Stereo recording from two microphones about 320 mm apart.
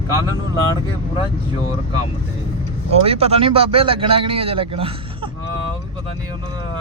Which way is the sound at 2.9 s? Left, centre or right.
Centre.